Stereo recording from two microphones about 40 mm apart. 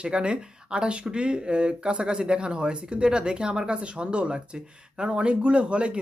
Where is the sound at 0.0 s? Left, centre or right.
Right.